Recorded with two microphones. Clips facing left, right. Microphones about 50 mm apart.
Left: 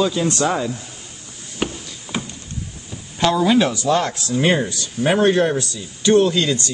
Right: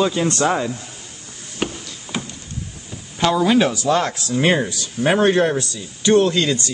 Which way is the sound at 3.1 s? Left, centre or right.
Centre.